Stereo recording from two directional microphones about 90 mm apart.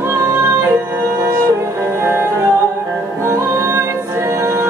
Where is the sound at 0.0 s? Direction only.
30° right (ahead or behind).